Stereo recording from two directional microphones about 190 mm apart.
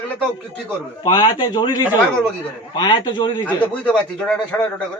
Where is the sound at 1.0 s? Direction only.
25° left (ahead or behind).